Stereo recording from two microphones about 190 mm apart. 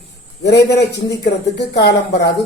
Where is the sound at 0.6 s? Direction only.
60° left (ahead or behind).